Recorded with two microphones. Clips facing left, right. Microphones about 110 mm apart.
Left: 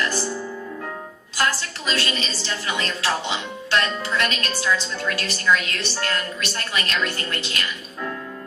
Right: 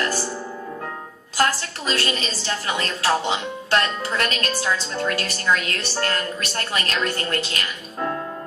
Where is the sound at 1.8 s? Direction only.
40° right (ahead or behind).